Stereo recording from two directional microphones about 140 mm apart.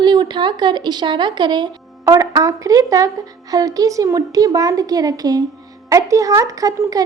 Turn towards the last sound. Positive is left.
turn(degrees=-25)  # may be behind; listen again after turning